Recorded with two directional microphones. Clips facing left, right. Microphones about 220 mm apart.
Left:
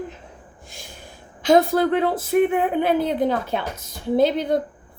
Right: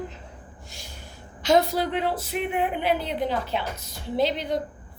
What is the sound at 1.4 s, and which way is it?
A woman's voice, 50° left (ahead or behind).